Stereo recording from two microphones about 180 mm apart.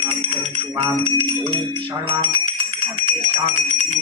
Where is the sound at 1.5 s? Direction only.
30° right (ahead or behind).